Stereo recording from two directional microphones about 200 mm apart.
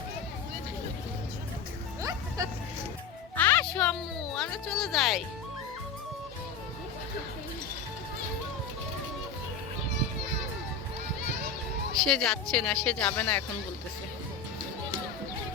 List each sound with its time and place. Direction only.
2.0 s music: 15° right (ahead or behind)
3.3 s music: 10° left (ahead or behind)
12.0 s a woman's voice: centre (ahead or behind)